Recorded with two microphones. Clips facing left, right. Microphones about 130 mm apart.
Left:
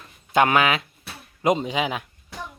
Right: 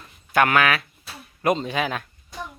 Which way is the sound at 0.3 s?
20° left (ahead or behind).